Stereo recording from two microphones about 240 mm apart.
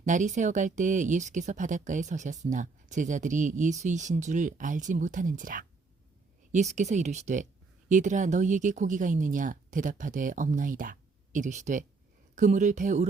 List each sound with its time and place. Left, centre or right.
0.0 s speech: right